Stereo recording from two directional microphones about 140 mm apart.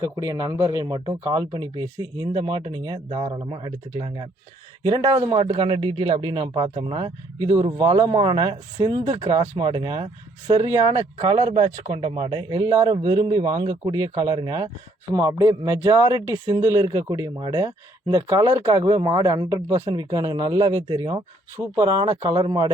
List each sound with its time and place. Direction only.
0.0 s speech: 25° right (ahead or behind)
15.1 s speech: 20° right (ahead or behind)
19.9 s speech: 35° right (ahead or behind)
21.5 s speech: 20° right (ahead or behind)
21.9 s speech: 30° right (ahead or behind)